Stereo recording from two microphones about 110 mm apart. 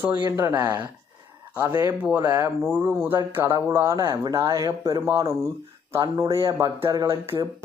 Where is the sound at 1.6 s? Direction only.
30° right (ahead or behind).